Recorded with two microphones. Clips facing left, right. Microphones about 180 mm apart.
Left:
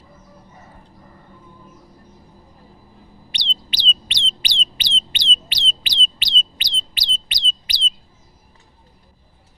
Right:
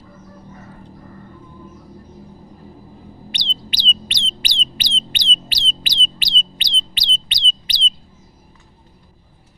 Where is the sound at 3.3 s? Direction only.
45° right (ahead or behind).